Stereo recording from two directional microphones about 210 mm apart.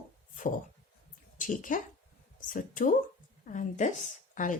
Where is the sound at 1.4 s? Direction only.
40° left (ahead or behind).